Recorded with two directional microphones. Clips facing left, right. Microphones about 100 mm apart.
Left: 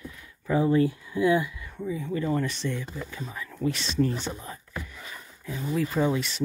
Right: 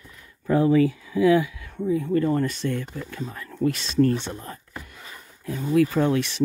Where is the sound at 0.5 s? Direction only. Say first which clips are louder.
Right 4 dB; 90° right.